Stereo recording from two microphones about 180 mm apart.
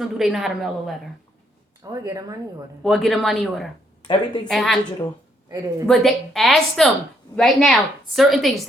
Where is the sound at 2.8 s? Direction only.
Centre (ahead or behind).